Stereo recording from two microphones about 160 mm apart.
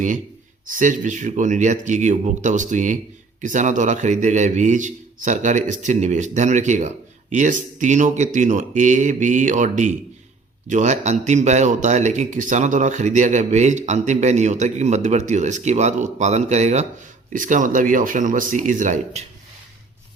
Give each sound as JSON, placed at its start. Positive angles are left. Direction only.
{"t": 0.7, "sound": "a man's voice", "side_deg": -50}